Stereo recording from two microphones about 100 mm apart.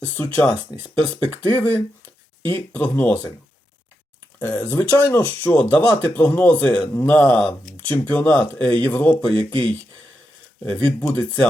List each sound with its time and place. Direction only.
0.0 s speech: 15° left (ahead or behind)
4.4 s speech: 15° left (ahead or behind)
6.8 s speech: 35° left (ahead or behind)
7.1 s speech: 15° left (ahead or behind)